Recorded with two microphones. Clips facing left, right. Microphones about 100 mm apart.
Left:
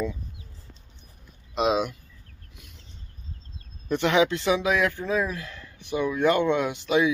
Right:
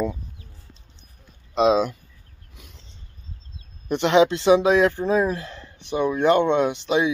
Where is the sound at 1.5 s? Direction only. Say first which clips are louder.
Right 5 dB; 35° right (ahead or behind).